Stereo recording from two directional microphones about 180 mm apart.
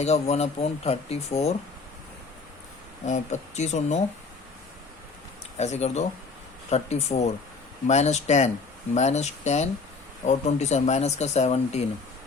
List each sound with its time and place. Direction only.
0.0 s speech: 35° left (ahead or behind)
3.1 s speech: 40° left (ahead or behind)
5.5 s speech: 40° left (ahead or behind)